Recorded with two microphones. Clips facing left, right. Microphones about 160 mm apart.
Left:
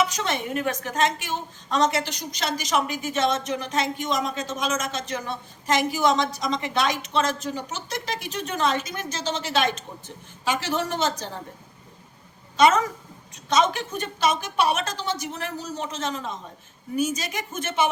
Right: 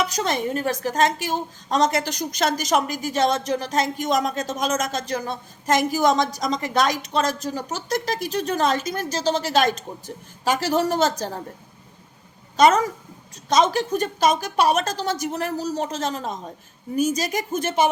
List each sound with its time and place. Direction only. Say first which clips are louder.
0.0 s a woman's voice: right 2 dB; 40° right (ahead or behind)
12.5 s a woman's voice: right 2 dB; 40° right (ahead or behind)